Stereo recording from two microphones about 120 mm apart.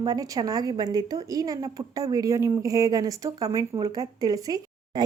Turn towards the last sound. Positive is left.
turn(degrees=-30)  # may be behind; listen again after turning